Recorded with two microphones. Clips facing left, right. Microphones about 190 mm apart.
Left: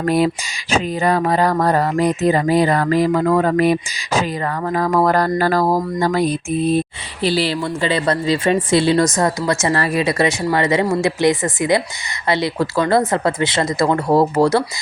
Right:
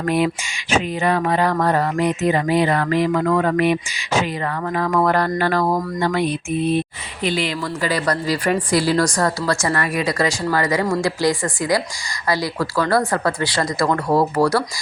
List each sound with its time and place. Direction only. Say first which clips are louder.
0.0 s speech: left 3 dB; 35° left (ahead or behind)